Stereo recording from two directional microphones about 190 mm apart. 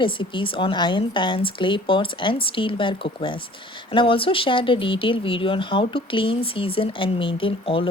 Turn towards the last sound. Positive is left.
turn(degrees=30)  # may be behind; listen again after turning